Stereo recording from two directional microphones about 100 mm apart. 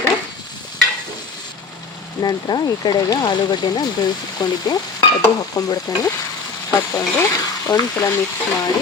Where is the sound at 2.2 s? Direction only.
45° left (ahead or behind).